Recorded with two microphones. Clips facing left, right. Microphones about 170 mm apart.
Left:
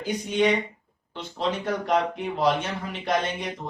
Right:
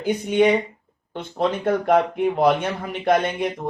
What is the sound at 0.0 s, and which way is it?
Speech, 55° right (ahead or behind).